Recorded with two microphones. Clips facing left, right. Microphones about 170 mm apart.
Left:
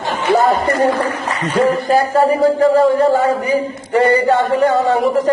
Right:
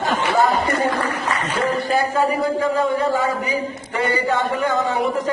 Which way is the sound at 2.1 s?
35° left (ahead or behind).